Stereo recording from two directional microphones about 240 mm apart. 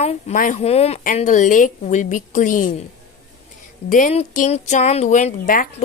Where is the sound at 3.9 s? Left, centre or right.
Left.